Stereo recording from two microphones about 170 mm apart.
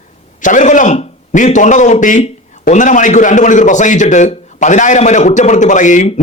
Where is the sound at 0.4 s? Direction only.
45° left (ahead or behind).